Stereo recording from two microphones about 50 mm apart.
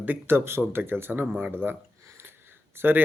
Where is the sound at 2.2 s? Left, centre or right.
Right.